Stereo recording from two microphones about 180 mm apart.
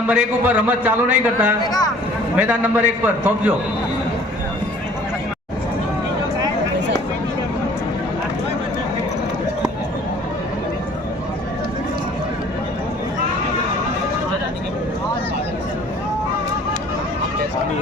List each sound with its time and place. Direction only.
0.1 s a man's voice: 10° right (ahead or behind)
1.6 s speech: 20° left (ahead or behind)
2.3 s a man's voice: 10° right (ahead or behind)